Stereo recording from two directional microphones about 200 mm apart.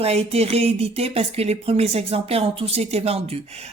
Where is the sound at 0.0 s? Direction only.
30° right (ahead or behind).